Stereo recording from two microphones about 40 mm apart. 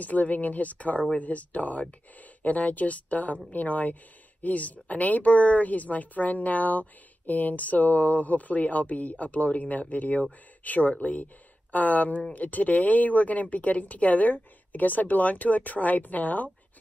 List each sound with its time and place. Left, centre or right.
0.0 s speech: left